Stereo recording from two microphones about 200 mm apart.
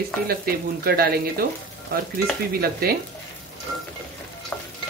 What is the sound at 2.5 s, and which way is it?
Speech, 50° right (ahead or behind).